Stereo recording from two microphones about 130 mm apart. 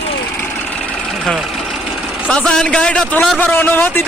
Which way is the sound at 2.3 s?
5° left (ahead or behind).